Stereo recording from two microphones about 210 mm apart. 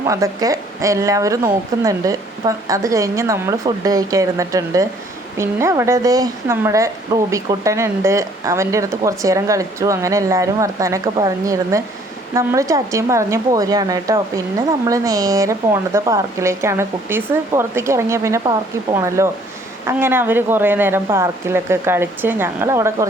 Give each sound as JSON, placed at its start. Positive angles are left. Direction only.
{"t": 0.1, "sound": "speech", "side_deg": -15}